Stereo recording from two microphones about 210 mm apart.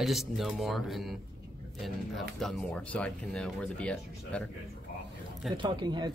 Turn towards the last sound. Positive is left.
turn(degrees=-20)  # may be behind; listen again after turning